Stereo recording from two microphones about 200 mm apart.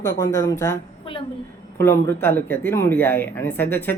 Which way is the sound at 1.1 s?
25° left (ahead or behind).